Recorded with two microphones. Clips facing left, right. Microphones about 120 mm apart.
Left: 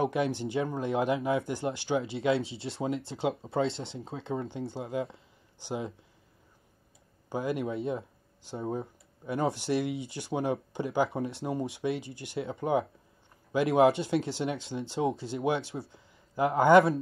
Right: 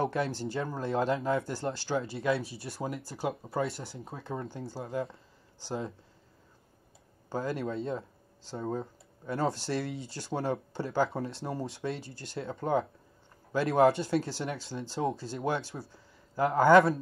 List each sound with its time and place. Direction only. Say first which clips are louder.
0.0 s speech: left 2 dB; 20° left (ahead or behind)
7.2 s speech: left 2 dB; 15° left (ahead or behind)